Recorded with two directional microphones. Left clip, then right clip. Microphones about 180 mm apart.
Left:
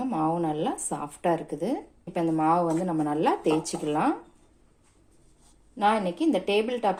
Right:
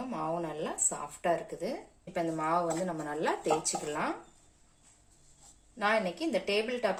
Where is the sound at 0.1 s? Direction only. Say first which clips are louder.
Left 7 dB; 40° left (ahead or behind).